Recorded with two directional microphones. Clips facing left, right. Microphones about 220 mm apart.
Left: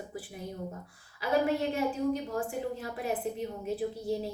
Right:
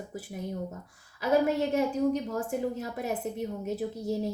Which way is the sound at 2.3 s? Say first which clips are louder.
Right 3 dB; 40° right (ahead or behind).